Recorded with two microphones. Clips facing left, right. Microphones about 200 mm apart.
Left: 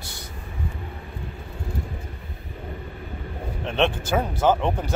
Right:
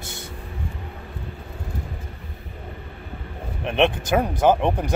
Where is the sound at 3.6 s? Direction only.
15° right (ahead or behind).